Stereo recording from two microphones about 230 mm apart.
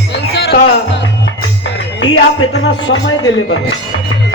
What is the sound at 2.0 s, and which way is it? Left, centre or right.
Music, left.